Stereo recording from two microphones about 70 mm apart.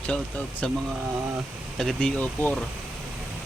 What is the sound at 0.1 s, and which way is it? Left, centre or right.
Speech, centre.